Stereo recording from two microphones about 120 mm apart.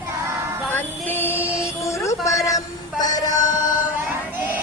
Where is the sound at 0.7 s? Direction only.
15° left (ahead or behind); by 3.8 s 35° left (ahead or behind).